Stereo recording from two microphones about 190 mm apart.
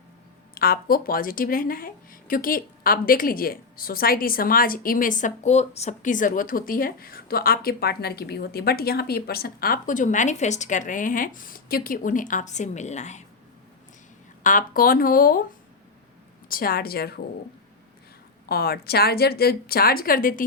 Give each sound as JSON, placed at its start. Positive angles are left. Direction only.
{"t": 0.5, "sound": "speech", "side_deg": 50}
{"t": 14.4, "sound": "speech", "side_deg": 45}
{"t": 16.5, "sound": "speech", "side_deg": 50}
{"t": 18.4, "sound": "speech", "side_deg": 55}